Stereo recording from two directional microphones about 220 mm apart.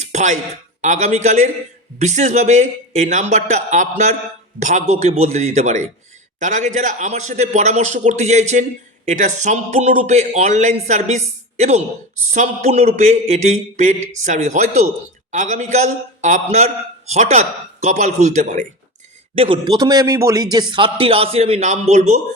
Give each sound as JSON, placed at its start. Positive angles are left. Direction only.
{"t": 0.0, "sound": "a sound", "side_deg": -30}
{"t": 0.8, "sound": "a man's voice", "side_deg": -30}
{"t": 19.4, "sound": "a man's voice", "side_deg": -20}